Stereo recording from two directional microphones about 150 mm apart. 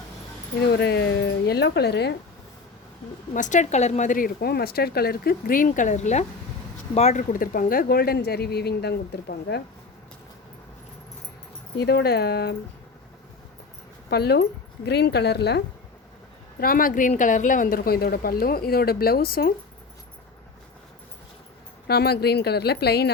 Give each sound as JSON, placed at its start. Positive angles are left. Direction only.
{"t": 0.6, "sound": "speech", "side_deg": 90}
{"t": 3.3, "sound": "a woman's voice", "side_deg": 55}
{"t": 11.8, "sound": "speech", "side_deg": 90}
{"t": 14.1, "sound": "speech", "side_deg": 90}
{"t": 16.6, "sound": "a woman's voice", "side_deg": 75}
{"t": 21.8, "sound": "speech", "side_deg": 90}